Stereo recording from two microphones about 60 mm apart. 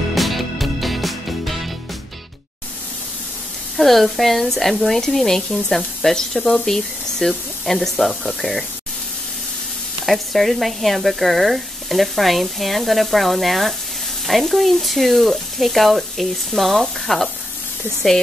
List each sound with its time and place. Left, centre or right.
0.1 s music: centre
3.7 s speech: centre
10.0 s speech: centre